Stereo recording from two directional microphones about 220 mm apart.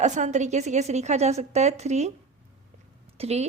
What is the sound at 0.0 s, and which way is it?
Speech, 35° right (ahead or behind).